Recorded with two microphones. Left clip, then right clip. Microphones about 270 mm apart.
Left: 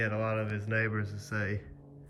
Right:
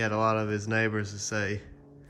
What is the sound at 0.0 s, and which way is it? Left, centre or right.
Speech, centre.